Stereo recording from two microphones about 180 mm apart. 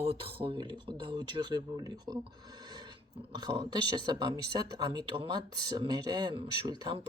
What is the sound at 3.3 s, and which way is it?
Speech, 25° right (ahead or behind).